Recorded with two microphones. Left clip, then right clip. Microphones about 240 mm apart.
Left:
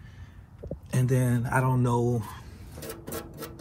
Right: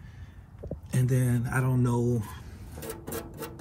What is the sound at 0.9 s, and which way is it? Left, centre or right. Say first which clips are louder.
Speech: left 3 dB; centre.